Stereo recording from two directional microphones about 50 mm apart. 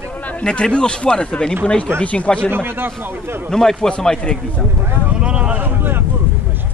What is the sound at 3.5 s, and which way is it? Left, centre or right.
A man's voice, centre.